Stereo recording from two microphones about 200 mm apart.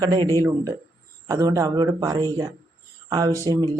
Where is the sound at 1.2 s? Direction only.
15° right (ahead or behind).